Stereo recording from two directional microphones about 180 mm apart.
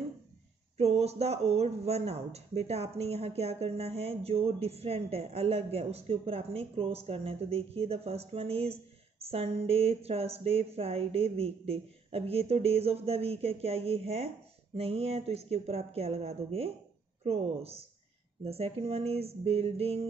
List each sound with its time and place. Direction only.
0.7 s speech: 35° right (ahead or behind)